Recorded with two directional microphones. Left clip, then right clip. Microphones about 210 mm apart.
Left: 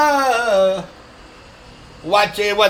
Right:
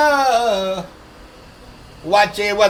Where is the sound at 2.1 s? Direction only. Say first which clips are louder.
Right 1 dB; 15° left (ahead or behind).